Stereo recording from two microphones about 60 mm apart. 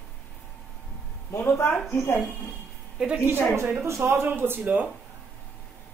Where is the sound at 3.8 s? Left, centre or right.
Right.